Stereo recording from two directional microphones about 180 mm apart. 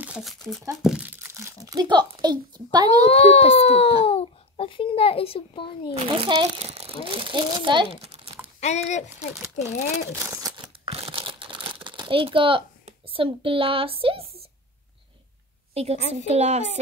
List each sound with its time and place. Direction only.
0.0 s speech: 5° right (ahead or behind)
0.8 s a sound: 10° right (ahead or behind); by 2.9 s 25° right (ahead or behind)
3.1 s a child's voice: 35° left (ahead or behind)
6.0 s speech: 30° right (ahead or behind)
8.5 s speech: 40° left (ahead or behind)
10.1 s a sound: 15° right (ahead or behind)
10.9 s crumpling: 30° right (ahead or behind)
15.7 s a woman's voice: 35° right (ahead or behind)